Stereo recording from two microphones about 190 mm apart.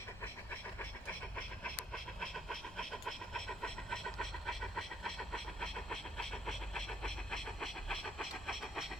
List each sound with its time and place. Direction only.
1.4 s pant: 5° left (ahead or behind)